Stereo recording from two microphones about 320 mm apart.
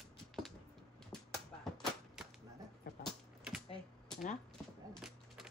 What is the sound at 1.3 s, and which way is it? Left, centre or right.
Cap gun, centre.